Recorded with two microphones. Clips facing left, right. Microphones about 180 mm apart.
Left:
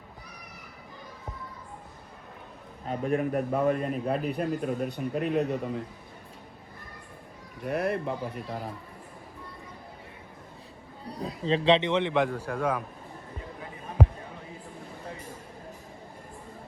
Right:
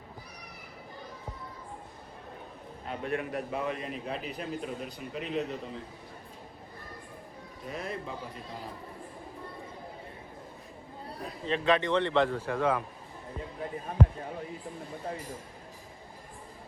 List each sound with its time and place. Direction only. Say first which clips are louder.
2.8 s a man's voice: left 6 dB; 40° left (ahead or behind); by 5.8 s 60° left (ahead or behind)
7.6 s speech: left 9 dB; 65° left (ahead or behind)
11.2 s a man's voice: left 5 dB; 30° left (ahead or behind)
12.3 s speech: right 1 dB; 5° left (ahead or behind)